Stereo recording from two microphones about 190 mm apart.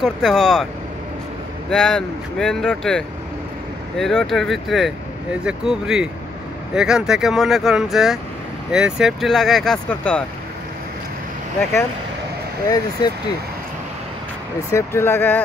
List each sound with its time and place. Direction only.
0.0 s speech: centre (ahead or behind)
1.7 s speech: 5° left (ahead or behind)
12.6 s speech: 20° left (ahead or behind)
14.7 s speech: 15° left (ahead or behind)